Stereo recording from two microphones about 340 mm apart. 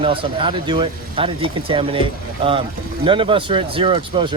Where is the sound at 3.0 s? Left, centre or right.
Centre.